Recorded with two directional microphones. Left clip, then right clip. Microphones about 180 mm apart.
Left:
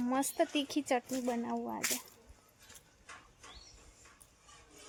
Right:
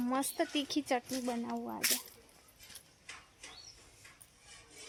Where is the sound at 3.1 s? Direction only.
45° left (ahead or behind).